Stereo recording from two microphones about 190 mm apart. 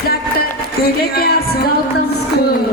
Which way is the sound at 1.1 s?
55° left (ahead or behind).